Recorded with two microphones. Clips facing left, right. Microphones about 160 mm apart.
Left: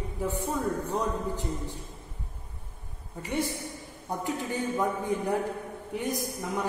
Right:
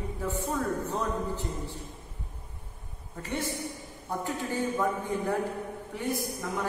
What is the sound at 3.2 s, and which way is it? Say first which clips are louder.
A man's voice: left 2 dB; 15° left (ahead or behind).